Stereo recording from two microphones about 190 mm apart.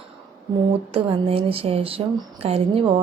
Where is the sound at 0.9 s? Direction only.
30° right (ahead or behind).